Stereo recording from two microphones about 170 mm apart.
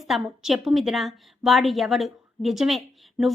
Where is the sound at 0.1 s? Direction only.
Centre (ahead or behind).